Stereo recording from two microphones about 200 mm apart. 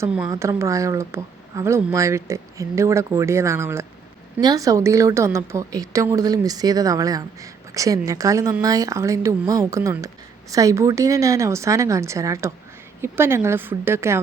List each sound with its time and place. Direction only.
0.0 s a woman's voice: 15° right (ahead or behind)